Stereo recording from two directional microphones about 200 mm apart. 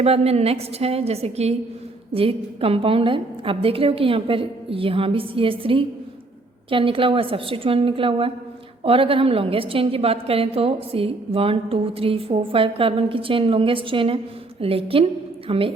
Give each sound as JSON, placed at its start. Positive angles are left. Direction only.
{"t": 0.0, "sound": "a woman's voice", "side_deg": -30}